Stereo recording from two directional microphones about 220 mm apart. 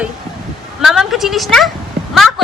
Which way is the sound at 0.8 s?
Centre (ahead or behind).